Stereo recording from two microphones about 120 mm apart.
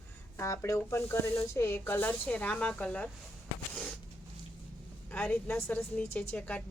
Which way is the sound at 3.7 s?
10° left (ahead or behind).